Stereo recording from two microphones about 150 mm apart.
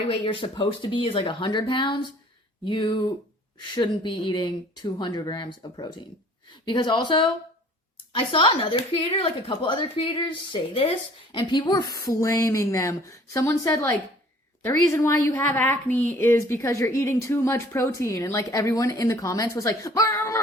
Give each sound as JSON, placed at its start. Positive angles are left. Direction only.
{"t": 0.1, "sound": "a woman's voice", "side_deg": 35}